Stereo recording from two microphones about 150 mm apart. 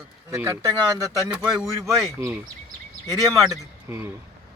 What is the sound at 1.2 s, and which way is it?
Speech, 5° right (ahead or behind).